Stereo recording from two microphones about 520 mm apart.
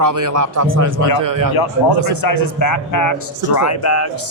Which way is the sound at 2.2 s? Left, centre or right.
Left.